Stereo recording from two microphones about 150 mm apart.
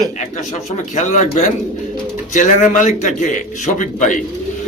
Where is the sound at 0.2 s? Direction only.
50° left (ahead or behind).